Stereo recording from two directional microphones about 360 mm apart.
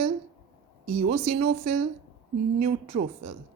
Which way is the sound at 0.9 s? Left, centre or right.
Centre.